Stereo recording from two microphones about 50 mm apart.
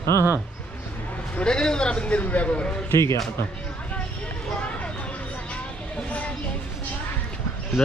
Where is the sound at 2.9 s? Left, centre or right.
Left.